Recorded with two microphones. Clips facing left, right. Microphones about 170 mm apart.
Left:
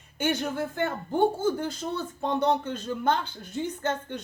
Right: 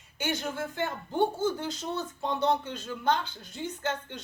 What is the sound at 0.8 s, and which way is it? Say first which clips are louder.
A woman's voice: left 3 dB; 50° left (ahead or behind).